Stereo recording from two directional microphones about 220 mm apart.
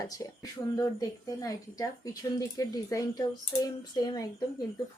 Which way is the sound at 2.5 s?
15° left (ahead or behind).